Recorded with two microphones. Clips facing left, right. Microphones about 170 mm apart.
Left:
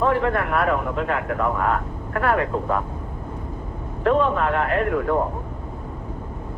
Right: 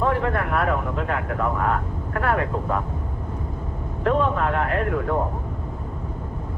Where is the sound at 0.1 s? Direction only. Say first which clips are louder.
Left 2 dB; 90° left.